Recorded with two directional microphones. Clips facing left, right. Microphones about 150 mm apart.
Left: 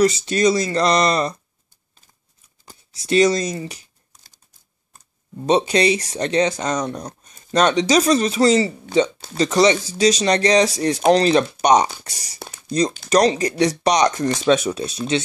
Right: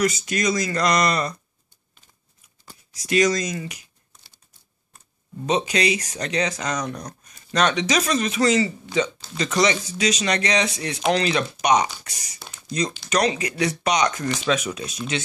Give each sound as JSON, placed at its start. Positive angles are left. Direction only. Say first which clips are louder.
{"t": 0.0, "sound": "speech", "louder": "left 6 dB", "side_deg": 30}
{"t": 2.9, "sound": "a sound", "louder": "left 4 dB", "side_deg": 30}
{"t": 5.5, "sound": "speech", "louder": "left 5 dB", "side_deg": 35}